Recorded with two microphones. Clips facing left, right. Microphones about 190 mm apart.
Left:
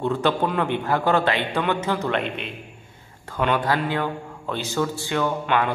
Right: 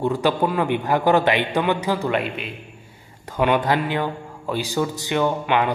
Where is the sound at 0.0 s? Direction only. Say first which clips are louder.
Right 2 dB; 10° right (ahead or behind).